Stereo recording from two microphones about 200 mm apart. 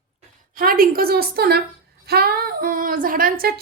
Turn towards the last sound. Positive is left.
turn(degrees=-45)  # may be behind; listen again after turning